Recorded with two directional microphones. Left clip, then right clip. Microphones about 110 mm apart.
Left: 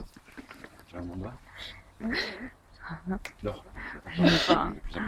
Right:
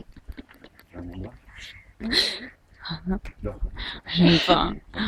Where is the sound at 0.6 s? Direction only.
5° right (ahead or behind).